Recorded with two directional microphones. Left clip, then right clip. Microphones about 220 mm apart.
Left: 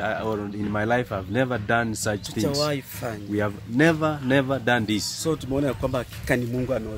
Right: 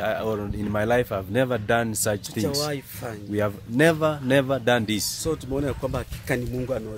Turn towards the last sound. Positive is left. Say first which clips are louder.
# left 2 dB
turn(degrees=0)  # may be behind; listen again after turning